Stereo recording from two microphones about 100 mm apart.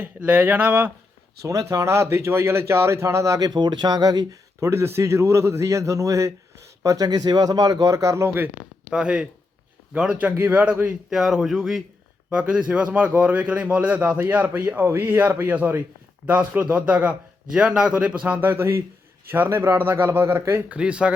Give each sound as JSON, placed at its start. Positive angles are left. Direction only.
{"t": 0.0, "sound": "a man's voice", "side_deg": -15}
{"t": 1.4, "sound": "speech", "side_deg": -35}
{"t": 4.6, "sound": "a man's voice", "side_deg": -25}
{"t": 8.9, "sound": "a man's voice", "side_deg": -10}
{"t": 20.7, "sound": "a man's voice", "side_deg": -10}